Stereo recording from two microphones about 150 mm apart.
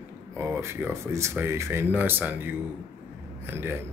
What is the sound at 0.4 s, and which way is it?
Speech, 15° right (ahead or behind).